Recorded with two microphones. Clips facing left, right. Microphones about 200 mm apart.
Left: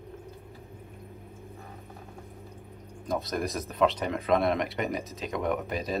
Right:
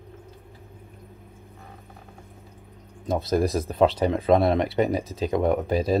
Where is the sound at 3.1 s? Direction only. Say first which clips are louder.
Right 7 dB; 30° right (ahead or behind).